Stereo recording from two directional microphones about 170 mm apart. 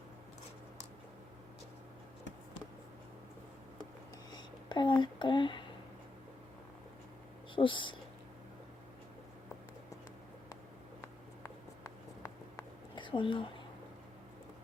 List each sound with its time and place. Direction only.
4.3 s a sound: 25° left (ahead or behind)
7.5 s speech: 30° left (ahead or behind)
11.0 s writing: 20° left (ahead or behind)